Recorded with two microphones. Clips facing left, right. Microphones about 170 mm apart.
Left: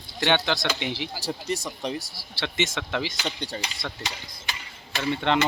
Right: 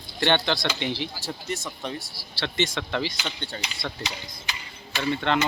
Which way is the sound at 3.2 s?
40° left (ahead or behind).